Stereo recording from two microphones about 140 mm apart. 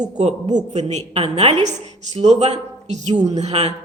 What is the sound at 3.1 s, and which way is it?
Speech, 25° right (ahead or behind).